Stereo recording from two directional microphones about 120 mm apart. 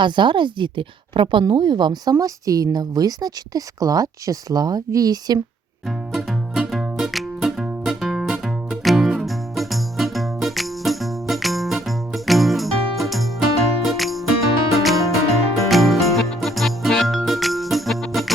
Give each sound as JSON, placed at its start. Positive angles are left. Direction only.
{"t": 0.0, "sound": "a woman's voice", "side_deg": -40}
{"t": 6.1, "sound": "music", "side_deg": -5}